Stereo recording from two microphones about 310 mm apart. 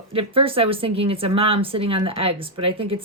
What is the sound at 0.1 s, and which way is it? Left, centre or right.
Speech, centre.